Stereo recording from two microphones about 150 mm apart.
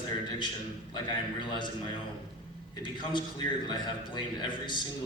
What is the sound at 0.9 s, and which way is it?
Speech, 30° left (ahead or behind).